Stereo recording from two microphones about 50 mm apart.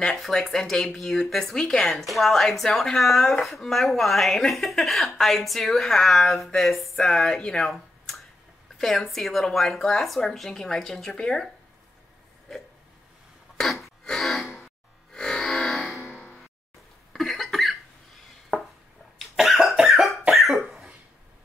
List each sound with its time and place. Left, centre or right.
0.1 s a woman's voice: centre
8.7 s a woman's voice: centre
13.6 s a sound: centre
14.0 s music: centre
17.1 s cough: centre
19.1 s cough: centre